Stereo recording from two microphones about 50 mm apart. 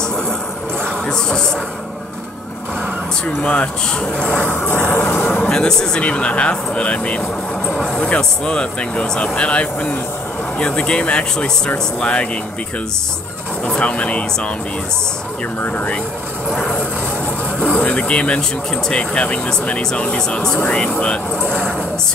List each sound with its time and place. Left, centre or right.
0.8 s music: centre
3.3 s speech: left
5.5 s speech: centre
13.7 s speech: left
16.5 s speech: centre